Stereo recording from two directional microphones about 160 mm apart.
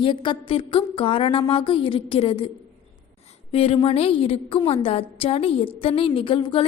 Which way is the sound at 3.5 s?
35° left (ahead or behind).